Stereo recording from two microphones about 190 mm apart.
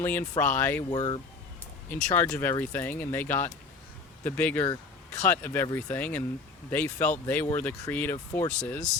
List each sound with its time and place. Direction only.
0.0 s speech: 10° left (ahead or behind)
0.9 s speech: 25° left (ahead or behind)
1.9 s speech: 10° left (ahead or behind)